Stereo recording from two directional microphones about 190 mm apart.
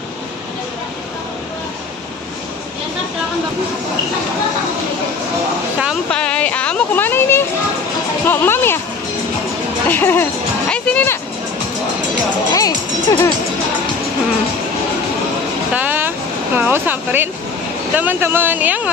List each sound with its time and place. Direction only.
5.8 s a sound: centre (ahead or behind)
8.3 s music: 10° left (ahead or behind)
9.8 s speech: 10° left (ahead or behind)
10.7 s a sound: 5° left (ahead or behind)
12.5 s music: 20° left (ahead or behind)
15.7 s vehicle: 10° right (ahead or behind)
16.5 s speech: 10° right (ahead or behind)